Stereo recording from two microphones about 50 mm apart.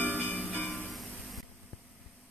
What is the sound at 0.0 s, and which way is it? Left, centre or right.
Music, left.